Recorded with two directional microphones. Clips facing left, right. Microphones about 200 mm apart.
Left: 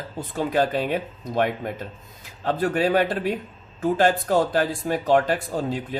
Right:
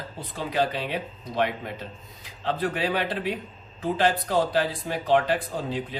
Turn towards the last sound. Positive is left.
turn(degrees=45)  # may be behind; listen again after turning